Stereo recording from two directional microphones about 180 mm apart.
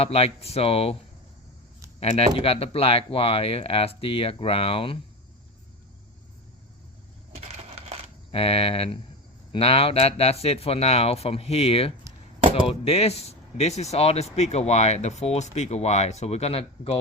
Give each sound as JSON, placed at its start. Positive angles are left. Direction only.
{"t": 0.0, "sound": "speech", "side_deg": 35}
{"t": 2.0, "sound": "speech", "side_deg": 35}
{"t": 7.3, "sound": "crushing", "side_deg": -35}
{"t": 8.3, "sound": "speech", "side_deg": 30}